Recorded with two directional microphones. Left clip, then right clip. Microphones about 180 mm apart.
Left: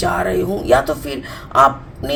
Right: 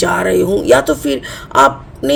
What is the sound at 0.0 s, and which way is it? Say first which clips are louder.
Speech: right 5 dB; 50° right (ahead or behind).